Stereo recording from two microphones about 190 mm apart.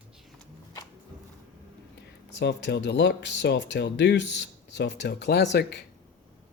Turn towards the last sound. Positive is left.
turn(degrees=60)  # may be behind; listen again after turning